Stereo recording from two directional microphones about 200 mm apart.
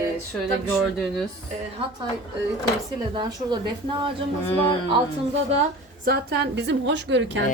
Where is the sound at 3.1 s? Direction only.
20° right (ahead or behind).